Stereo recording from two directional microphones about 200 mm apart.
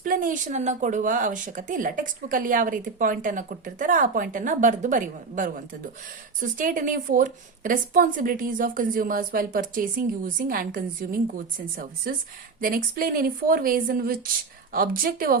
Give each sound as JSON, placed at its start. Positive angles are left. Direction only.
{"t": 0.0, "sound": "a woman's voice", "side_deg": -45}